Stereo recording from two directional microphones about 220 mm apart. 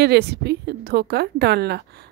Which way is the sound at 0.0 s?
50° right (ahead or behind).